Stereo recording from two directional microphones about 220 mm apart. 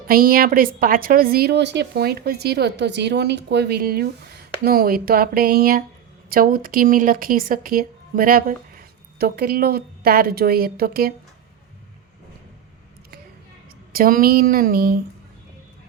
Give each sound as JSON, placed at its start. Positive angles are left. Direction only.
{"t": 0.1, "sound": "a woman's voice", "side_deg": -40}
{"t": 13.9, "sound": "speech", "side_deg": -40}